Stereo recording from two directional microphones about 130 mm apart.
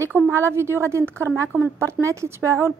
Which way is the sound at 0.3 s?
20° right (ahead or behind).